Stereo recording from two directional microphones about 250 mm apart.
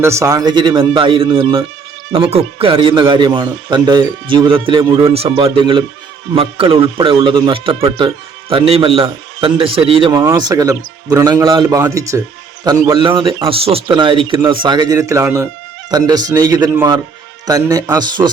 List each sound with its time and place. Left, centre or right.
0.0 s a man's voice: centre